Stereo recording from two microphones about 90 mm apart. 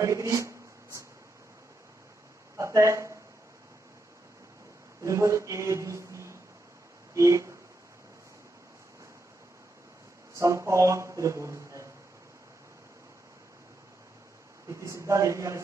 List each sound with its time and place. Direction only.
0.0 s speech: 35° right (ahead or behind)
2.5 s speech: 35° right (ahead or behind)
5.0 s speech: 35° right (ahead or behind)
10.3 s speech: 35° right (ahead or behind)
14.7 s speech: 35° right (ahead or behind)